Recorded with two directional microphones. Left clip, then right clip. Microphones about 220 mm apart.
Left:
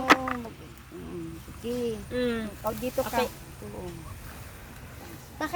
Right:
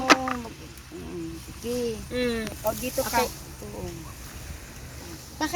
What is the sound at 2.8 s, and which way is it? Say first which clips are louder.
Speech: right 1 dB; 35° left (ahead or behind).